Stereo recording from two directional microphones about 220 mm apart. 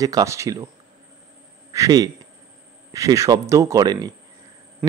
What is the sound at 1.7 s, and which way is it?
A man's voice, 15° right (ahead or behind).